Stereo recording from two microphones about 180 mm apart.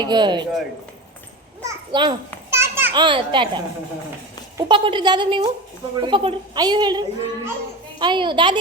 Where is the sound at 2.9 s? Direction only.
25° right (ahead or behind).